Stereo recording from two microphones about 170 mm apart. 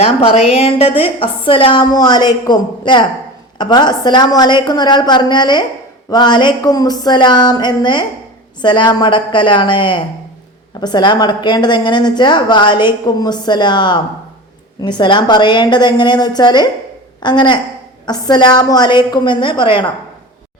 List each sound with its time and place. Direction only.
0.0 s a woman's voice: 35° left (ahead or behind)